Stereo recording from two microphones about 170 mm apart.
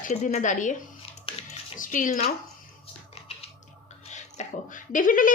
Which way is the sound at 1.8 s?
50° left (ahead or behind).